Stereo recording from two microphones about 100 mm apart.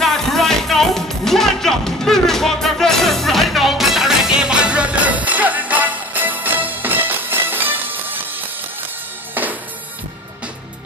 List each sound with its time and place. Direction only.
0.0 s music: centre (ahead or behind); by 8.2 s 20° right (ahead or behind)
9.3 s music: 15° right (ahead or behind)